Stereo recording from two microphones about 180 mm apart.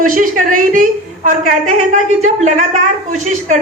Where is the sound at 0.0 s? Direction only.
50° right (ahead or behind).